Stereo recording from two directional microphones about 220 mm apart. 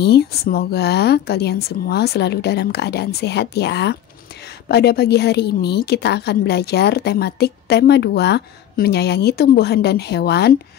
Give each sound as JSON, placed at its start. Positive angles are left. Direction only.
{"t": 0.0, "sound": "a woman's voice", "side_deg": 45}